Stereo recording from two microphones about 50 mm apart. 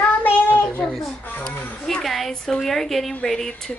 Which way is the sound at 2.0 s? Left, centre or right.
Centre.